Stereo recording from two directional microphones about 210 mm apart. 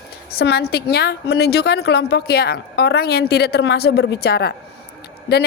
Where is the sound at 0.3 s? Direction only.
50° left (ahead or behind).